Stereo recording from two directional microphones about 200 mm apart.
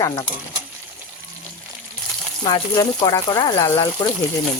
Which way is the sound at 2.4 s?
20° left (ahead or behind).